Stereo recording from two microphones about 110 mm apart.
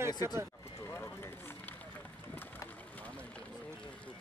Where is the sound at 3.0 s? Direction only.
10° left (ahead or behind).